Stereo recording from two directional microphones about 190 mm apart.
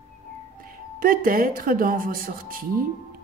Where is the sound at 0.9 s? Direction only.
50° right (ahead or behind).